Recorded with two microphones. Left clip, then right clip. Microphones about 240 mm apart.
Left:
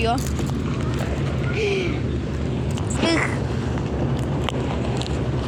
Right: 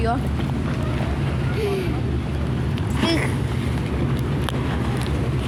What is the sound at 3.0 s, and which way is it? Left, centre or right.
Speech, centre.